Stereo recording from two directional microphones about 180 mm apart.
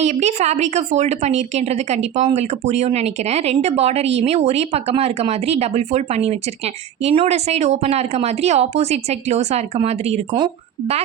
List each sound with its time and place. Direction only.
0.0 s a woman's voice: 40° right (ahead or behind)